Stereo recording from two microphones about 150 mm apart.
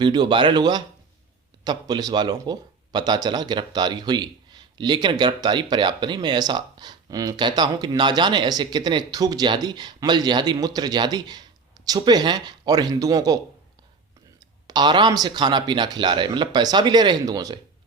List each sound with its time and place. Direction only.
0.0 s speech: 30° right (ahead or behind)
14.7 s speech: 30° right (ahead or behind)